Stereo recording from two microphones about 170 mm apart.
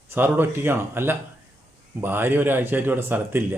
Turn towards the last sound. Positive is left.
turn(degrees=-10)  # may be behind; listen again after turning